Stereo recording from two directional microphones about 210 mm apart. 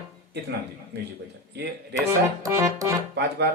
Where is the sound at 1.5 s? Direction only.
50° right (ahead or behind).